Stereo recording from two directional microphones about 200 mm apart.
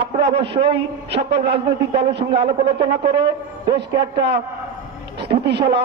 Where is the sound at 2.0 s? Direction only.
55° right (ahead or behind).